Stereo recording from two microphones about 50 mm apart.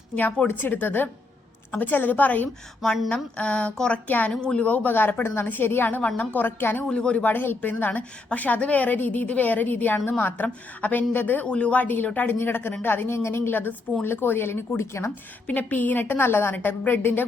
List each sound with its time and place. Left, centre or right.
0.2 s a woman's voice: left
3.1 s a sound: left
4.0 s a woman's voice: left
4.3 s a woman's voice: centre
4.6 s a woman's voice: left
5.2 s a woman's voice: left
5.5 s a woman's voice: left
6.0 s a sound: left
6.3 s a woman's voice: left
6.9 s a sound: left
7.3 s a woman's voice: left
11.4 s a woman's voice: left
13.1 s a woman's voice: left
15.4 s a woman's voice: left